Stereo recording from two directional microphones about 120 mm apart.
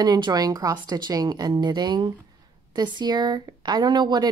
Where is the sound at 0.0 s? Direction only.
35° right (ahead or behind).